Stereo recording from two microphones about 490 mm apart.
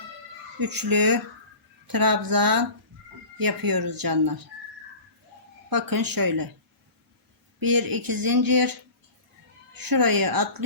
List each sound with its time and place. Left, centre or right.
0.6 s speech: right
5.7 s speech: right
7.6 s speech: right